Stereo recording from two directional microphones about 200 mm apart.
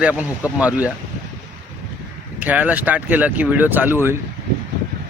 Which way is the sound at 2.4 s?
5° right (ahead or behind).